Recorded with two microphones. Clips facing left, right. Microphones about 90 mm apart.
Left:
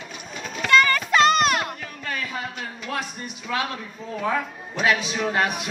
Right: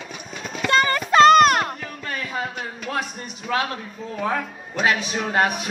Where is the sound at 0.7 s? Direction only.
30° right (ahead or behind).